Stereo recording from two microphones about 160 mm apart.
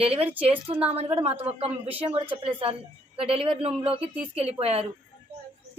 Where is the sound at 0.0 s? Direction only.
35° right (ahead or behind).